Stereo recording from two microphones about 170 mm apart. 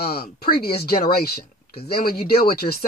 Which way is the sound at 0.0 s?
65° left (ahead or behind).